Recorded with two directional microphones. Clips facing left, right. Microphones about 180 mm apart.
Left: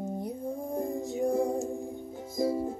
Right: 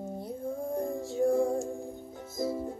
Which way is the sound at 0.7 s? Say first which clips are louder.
Even; 15° left (ahead or behind).